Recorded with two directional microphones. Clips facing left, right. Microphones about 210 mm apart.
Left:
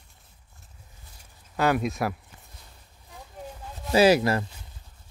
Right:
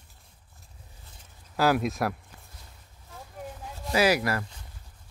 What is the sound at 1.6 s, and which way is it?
Speech, centre (ahead or behind).